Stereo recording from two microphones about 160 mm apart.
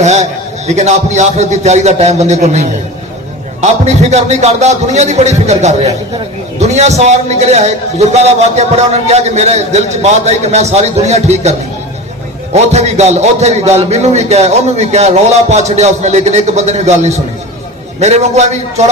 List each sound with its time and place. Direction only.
0.0 s a man's voice: 45° right (ahead or behind)
12.7 s a man's voice: 45° right (ahead or behind)